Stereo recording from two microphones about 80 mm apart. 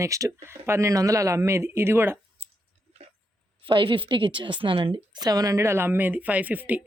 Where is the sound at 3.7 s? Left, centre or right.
Right.